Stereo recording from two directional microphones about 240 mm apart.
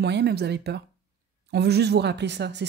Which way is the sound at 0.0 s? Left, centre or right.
Right.